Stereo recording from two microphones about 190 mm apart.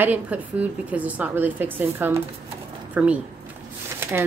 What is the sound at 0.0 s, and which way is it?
A woman's voice, 10° right (ahead or behind).